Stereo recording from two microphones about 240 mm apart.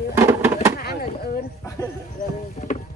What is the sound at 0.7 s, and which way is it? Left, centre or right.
Speech, left.